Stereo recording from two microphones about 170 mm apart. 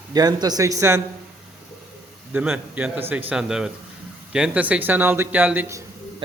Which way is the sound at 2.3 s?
10° right (ahead or behind).